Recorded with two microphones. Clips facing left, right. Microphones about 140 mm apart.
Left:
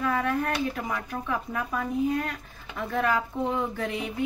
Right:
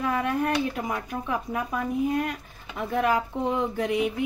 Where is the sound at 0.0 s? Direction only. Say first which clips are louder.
Right 1 dB; 15° right (ahead or behind).